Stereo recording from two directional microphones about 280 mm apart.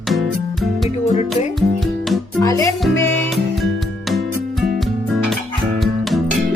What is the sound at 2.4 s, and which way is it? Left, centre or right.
Music, centre.